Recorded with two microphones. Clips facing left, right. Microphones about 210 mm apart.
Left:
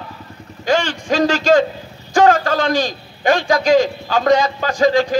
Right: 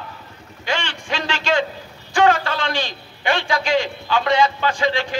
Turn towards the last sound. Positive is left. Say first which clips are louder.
# left 6 dB
turn(degrees=40)  # may be behind; listen again after turning